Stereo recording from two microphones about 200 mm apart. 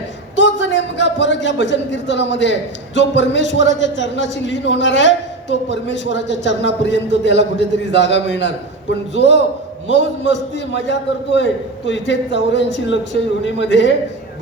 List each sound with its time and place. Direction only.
0.3 s a man's voice: 65° left (ahead or behind)